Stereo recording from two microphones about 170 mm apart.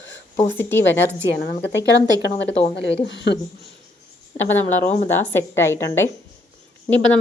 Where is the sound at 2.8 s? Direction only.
90° left.